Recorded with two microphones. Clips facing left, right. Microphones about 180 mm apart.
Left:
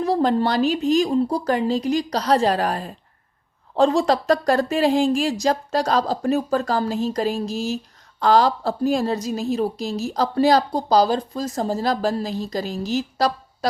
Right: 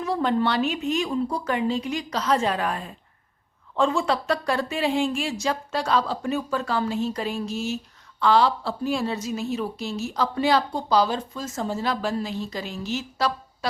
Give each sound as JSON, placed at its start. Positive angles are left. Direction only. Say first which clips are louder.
{"t": 0.0, "sound": "a woman's voice", "louder": "left 4 dB", "side_deg": 35}